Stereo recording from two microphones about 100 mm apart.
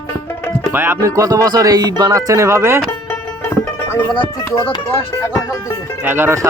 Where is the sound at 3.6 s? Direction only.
20° left (ahead or behind).